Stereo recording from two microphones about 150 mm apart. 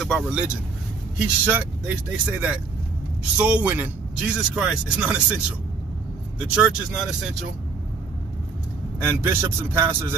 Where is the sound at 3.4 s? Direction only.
10° right (ahead or behind).